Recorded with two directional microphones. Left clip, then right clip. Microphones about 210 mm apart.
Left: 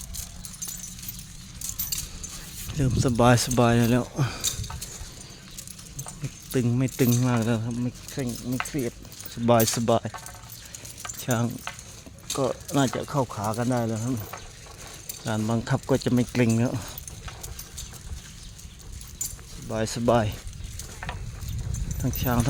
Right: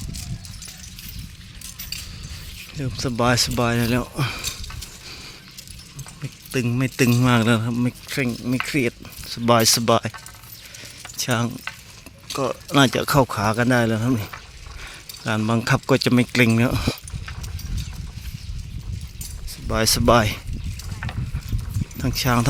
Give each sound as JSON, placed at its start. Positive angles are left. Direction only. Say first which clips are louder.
{"t": 2.7, "sound": "speech", "louder": "left 1 dB", "side_deg": 15}
{"t": 6.2, "sound": "speech", "louder": "right 2 dB", "side_deg": 0}
{"t": 7.1, "sound": "speech", "louder": "right 7 dB", "side_deg": -15}
{"t": 9.3, "sound": "speech", "louder": "right 5 dB", "side_deg": 0}
{"t": 11.0, "sound": "stir", "louder": "right 5 dB", "side_deg": 0}
{"t": 12.3, "sound": "speech", "louder": "right 4 dB", "side_deg": 0}
{"t": 13.1, "sound": "speech", "louder": "right 8 dB", "side_deg": -40}
{"t": 15.2, "sound": "speech", "louder": "right 6 dB", "side_deg": -10}
{"t": 19.7, "sound": "speech", "louder": "right 6 dB", "side_deg": -15}
{"t": 22.0, "sound": "speech", "louder": "right 6 dB", "side_deg": -5}